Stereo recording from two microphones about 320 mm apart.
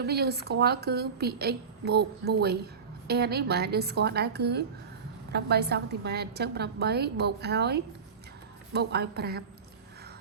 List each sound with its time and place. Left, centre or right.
0.0 s a woman's voice: right